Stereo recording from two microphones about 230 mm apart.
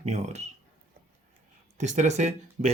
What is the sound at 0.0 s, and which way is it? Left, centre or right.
Speech, right.